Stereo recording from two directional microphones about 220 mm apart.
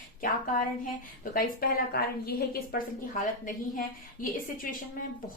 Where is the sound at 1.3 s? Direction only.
45° left (ahead or behind).